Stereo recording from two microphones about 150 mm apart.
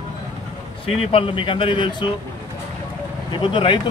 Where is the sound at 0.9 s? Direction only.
40° left (ahead or behind).